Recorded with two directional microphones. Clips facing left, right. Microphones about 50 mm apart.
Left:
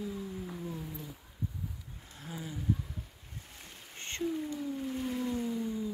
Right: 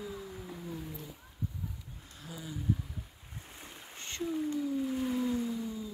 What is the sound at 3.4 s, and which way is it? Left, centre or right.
Boat, centre.